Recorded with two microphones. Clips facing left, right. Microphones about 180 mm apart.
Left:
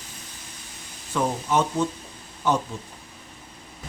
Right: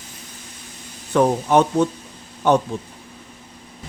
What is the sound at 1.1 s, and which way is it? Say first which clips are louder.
Speech: right 8 dB; 60° right (ahead or behind).